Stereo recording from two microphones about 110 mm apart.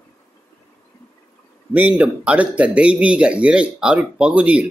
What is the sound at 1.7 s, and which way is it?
Speech, 15° right (ahead or behind).